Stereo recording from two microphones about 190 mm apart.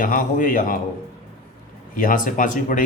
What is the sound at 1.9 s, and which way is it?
Speech, 45° left (ahead or behind).